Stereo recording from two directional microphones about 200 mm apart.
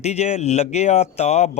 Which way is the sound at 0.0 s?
35° left (ahead or behind).